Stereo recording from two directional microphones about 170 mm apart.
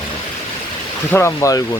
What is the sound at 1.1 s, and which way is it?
Speech, 15° left (ahead or behind).